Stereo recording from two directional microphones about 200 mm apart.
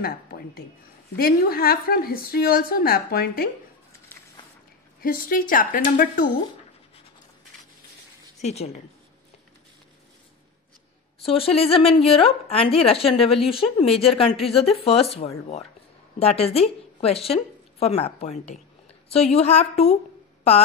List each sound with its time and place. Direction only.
0.0 s a woman's voice: 50° left (ahead or behind)
5.0 s a woman's voice: 45° left (ahead or behind)
8.4 s a woman's voice: 35° left (ahead or behind)
11.2 s a woman's voice: 30° left (ahead or behind)